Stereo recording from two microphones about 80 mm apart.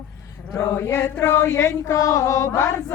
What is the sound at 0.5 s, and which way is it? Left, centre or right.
Chant, left.